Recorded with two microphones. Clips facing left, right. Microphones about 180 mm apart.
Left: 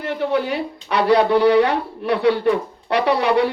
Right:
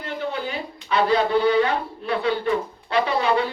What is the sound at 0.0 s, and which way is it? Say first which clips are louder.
Speech: left 7 dB; 65° left (ahead or behind).